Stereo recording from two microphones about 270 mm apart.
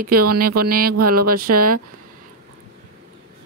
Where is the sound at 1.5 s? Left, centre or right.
Right.